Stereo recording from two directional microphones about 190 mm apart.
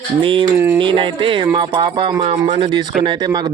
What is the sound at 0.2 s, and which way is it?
Speech, 25° right (ahead or behind).